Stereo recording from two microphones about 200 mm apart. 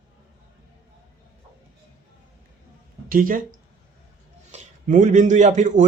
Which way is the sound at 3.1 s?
45° right (ahead or behind).